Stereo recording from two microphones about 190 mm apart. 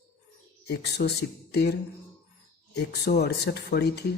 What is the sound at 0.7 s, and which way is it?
Speech, 60° left (ahead or behind).